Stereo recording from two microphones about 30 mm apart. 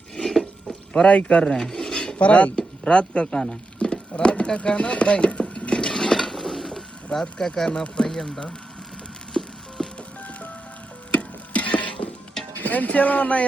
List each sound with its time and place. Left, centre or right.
0.2 s a sound: centre
1.0 s speech: left
1.8 s a sound: centre
2.1 s speech: left
2.6 s speech: left
5.9 s patter: centre
6.3 s bird: centre
7.7 s speech: left
8.0 s speech: centre
9.4 s a sound: centre
9.8 s music: centre
11.1 s tick-tock: left
12.6 s speech: left
12.9 s speech: left